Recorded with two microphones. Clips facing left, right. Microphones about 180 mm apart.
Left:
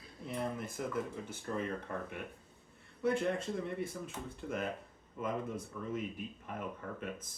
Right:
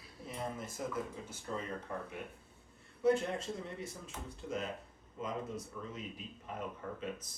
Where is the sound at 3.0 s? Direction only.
55° left (ahead or behind).